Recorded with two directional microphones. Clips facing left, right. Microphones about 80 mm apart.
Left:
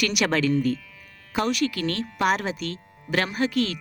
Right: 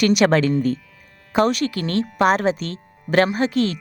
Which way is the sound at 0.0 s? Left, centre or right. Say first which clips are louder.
Right 7 dB; right.